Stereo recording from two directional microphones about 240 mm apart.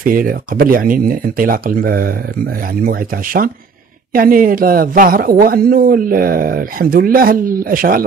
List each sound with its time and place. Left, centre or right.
0.0 s speech: right